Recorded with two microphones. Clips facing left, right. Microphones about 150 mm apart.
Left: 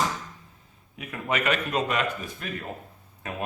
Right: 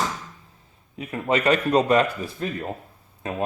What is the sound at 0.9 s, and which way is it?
Speech, 30° right (ahead or behind).